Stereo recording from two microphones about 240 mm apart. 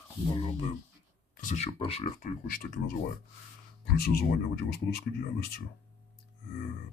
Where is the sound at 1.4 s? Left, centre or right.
Left.